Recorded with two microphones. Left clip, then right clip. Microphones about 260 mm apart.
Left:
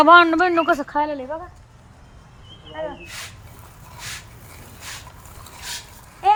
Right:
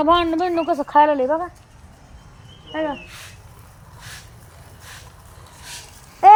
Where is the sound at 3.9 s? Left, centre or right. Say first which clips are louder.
Left 5 dB; left.